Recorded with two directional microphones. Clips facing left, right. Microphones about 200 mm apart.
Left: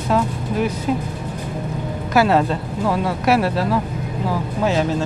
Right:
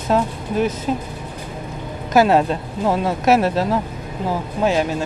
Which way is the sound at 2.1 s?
20° right (ahead or behind).